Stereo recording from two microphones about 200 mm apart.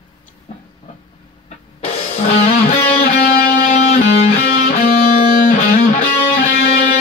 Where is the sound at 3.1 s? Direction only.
50° left (ahead or behind).